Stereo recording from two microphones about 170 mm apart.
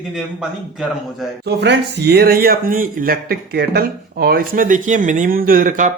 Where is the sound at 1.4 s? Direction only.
80° right.